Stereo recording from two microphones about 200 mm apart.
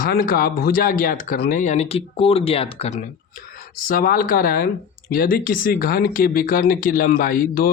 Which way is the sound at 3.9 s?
45° left (ahead or behind).